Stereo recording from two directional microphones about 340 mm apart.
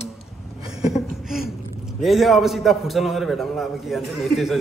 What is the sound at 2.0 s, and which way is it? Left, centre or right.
A man's voice, centre.